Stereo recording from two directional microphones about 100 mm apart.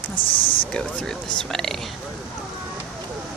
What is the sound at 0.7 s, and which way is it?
Speech, 5° left (ahead or behind).